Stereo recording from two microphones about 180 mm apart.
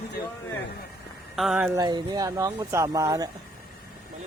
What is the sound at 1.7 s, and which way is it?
Speech, 20° right (ahead or behind).